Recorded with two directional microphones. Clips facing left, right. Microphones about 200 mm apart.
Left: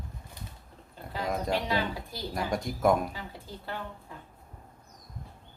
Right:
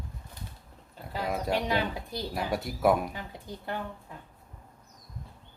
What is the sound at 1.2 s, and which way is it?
Speech, 5° right (ahead or behind).